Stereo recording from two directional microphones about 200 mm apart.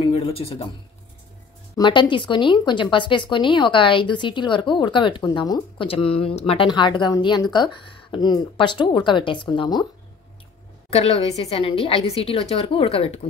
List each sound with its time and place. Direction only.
0.0 s speech: 30° left (ahead or behind)
1.8 s speech: 25° left (ahead or behind)
10.9 s speech: 30° left (ahead or behind)